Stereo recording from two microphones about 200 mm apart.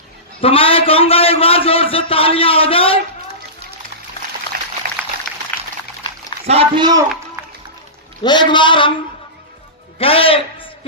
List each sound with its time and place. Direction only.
0.4 s a man's voice: 30° left (ahead or behind)
4.5 s boiling: 50° right (ahead or behind)
5.5 s a sound: 10° left (ahead or behind)
6.4 s a man's voice: 30° right (ahead or behind)
8.2 s a man's voice: 20° left (ahead or behind)
10.0 s a man's voice: 30° left (ahead or behind)